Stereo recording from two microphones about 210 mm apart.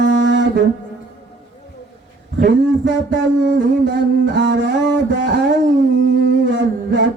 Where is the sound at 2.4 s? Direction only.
55° right (ahead or behind).